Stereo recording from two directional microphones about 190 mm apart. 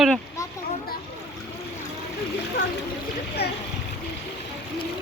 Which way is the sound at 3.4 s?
60° left (ahead or behind).